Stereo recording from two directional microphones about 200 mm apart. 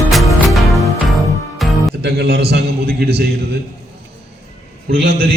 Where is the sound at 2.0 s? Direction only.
55° right (ahead or behind).